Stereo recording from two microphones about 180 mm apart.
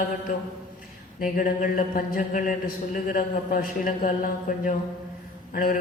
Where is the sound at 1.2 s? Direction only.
50° left (ahead or behind).